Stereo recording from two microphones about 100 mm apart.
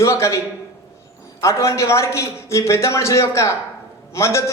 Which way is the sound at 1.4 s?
30° left (ahead or behind).